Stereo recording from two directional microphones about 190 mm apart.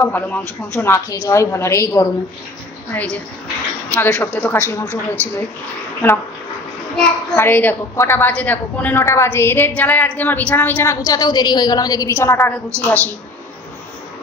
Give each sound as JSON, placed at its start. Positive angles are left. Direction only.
{"t": 0.0, "sound": "a woman's voice", "side_deg": 10}
{"t": 6.0, "sound": "a woman's voice", "side_deg": 10}